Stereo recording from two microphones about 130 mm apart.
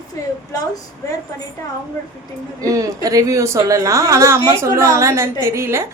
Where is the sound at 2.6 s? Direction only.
25° right (ahead or behind).